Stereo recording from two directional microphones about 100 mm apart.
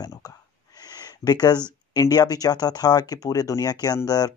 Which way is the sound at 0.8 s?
40° left (ahead or behind).